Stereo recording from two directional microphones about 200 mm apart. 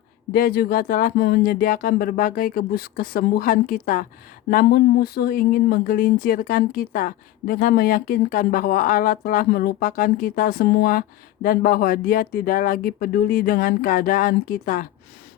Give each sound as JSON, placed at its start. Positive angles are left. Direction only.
{"t": 0.3, "sound": "speech", "side_deg": 50}